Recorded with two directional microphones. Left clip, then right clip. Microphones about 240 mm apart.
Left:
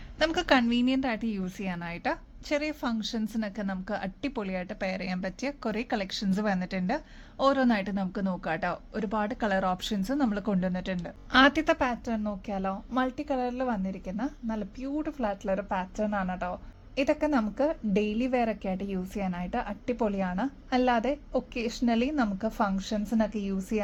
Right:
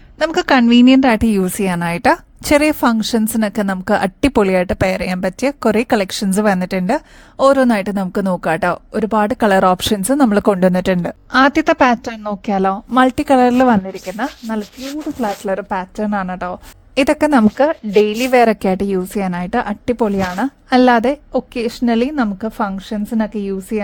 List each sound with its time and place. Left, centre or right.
0.2 s a woman's voice: right
11.3 s speech: right
11.6 s a woman's voice: right